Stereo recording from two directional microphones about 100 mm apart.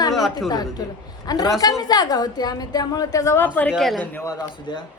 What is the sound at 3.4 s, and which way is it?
Speech, 15° left (ahead or behind).